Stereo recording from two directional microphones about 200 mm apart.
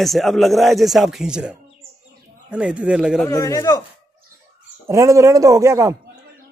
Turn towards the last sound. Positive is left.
turn(degrees=-15)  # may be behind; listen again after turning